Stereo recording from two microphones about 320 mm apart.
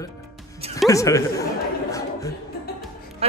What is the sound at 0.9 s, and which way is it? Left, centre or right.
A woman's voice, centre.